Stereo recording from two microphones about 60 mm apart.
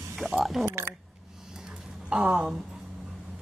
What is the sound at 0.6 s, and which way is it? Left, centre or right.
Speech, right.